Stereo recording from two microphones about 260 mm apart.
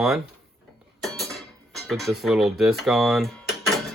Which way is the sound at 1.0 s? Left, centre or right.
Centre.